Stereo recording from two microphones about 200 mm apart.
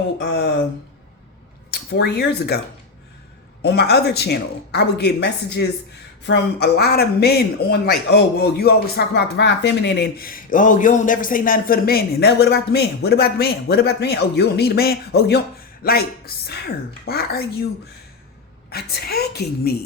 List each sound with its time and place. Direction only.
0.2 s speech: 55° left (ahead or behind)
1.7 s speech: 55° left (ahead or behind)
3.6 s speech: 55° left (ahead or behind)
18.7 s speech: 50° left (ahead or behind)